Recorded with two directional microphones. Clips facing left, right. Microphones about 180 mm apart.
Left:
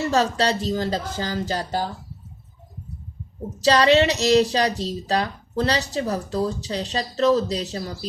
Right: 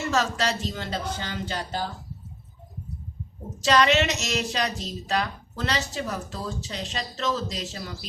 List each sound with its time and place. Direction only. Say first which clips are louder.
0.1 s a woman's voice: left 3 dB; 35° left (ahead or behind)
3.6 s a woman's voice: left 4 dB; 35° left (ahead or behind)